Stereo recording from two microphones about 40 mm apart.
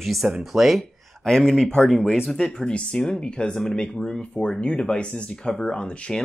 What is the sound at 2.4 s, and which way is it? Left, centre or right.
Speech, left.